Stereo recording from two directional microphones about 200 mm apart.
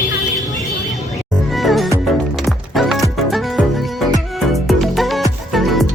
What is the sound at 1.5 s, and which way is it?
Music, centre (ahead or behind).